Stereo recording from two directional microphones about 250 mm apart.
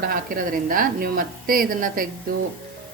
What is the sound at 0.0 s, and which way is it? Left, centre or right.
A woman's voice, right.